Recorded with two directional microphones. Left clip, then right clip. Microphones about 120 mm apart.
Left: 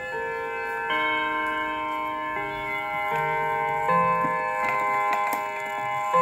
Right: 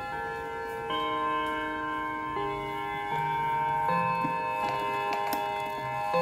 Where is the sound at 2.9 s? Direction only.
35° left (ahead or behind).